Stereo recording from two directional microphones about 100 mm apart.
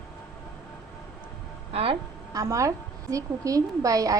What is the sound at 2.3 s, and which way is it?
A woman's voice, 30° right (ahead or behind).